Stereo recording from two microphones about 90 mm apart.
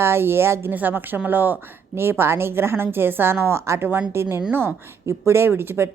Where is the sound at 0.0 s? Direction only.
25° right (ahead or behind).